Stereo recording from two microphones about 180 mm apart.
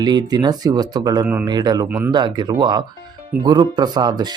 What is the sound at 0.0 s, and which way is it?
Speech, 25° right (ahead or behind).